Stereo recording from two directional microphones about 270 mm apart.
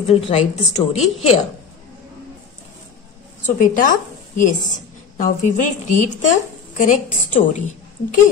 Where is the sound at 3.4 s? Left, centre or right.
Left.